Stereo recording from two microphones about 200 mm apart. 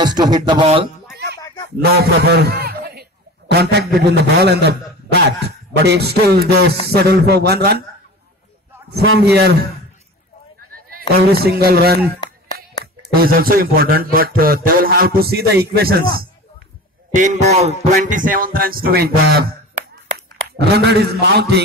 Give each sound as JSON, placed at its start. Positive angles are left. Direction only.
{"t": 0.0, "sound": "speech", "side_deg": -20}
{"t": 1.9, "sound": "a man's voice", "side_deg": -55}
{"t": 8.9, "sound": "a man's voice", "side_deg": -55}
{"t": 11.0, "sound": "a man's voice", "side_deg": -50}
{"t": 13.1, "sound": "a man's voice", "side_deg": -50}
{"t": 20.5, "sound": "a man's voice", "side_deg": -55}